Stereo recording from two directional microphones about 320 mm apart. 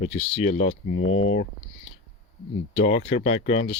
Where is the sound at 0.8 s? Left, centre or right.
Left.